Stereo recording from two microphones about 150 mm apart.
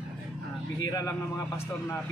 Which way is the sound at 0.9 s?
25° left (ahead or behind).